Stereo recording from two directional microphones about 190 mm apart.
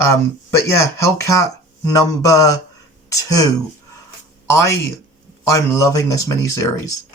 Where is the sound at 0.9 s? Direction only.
15° left (ahead or behind).